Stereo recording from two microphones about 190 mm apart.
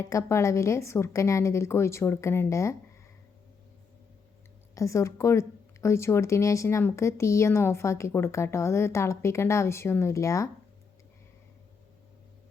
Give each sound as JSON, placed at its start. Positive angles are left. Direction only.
{"t": 0.0, "sound": "speech", "side_deg": 15}
{"t": 4.7, "sound": "speech", "side_deg": 15}